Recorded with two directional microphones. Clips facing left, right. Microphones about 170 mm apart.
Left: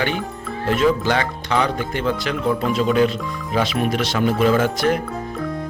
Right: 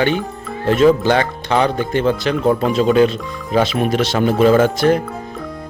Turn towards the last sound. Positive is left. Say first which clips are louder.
# right 5 dB
turn(degrees=-30)  # may be behind; listen again after turning